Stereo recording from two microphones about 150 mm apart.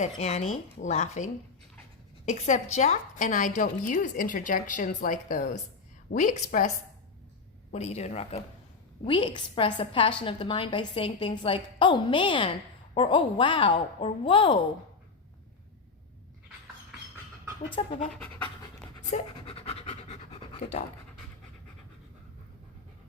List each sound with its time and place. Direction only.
0.0 s speech: 45° left (ahead or behind)
2.2 s a woman's voice: 55° left (ahead or behind)
7.7 s speech: 45° left (ahead or behind)
9.0 s a woman's voice: 35° left (ahead or behind)
17.8 s speech: 40° left (ahead or behind)
19.1 s speech: 55° left (ahead or behind)
19.5 s pant: 40° left (ahead or behind)